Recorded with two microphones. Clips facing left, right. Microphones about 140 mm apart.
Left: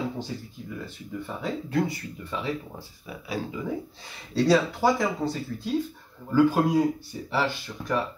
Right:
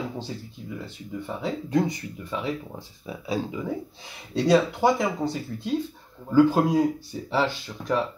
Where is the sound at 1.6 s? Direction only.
20° right (ahead or behind).